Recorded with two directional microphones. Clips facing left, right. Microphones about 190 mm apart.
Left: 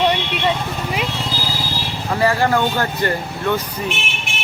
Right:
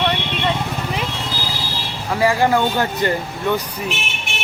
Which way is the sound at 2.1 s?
15° right (ahead or behind).